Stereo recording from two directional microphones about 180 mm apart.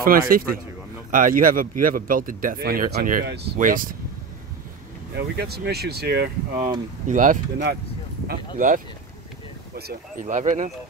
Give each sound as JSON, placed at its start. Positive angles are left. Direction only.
{"t": 0.0, "sound": "speech", "side_deg": -55}
{"t": 5.1, "sound": "speech", "side_deg": -65}
{"t": 7.1, "sound": "speech", "side_deg": -45}
{"t": 9.8, "sound": "speech", "side_deg": -60}
{"t": 10.2, "sound": "speech", "side_deg": -45}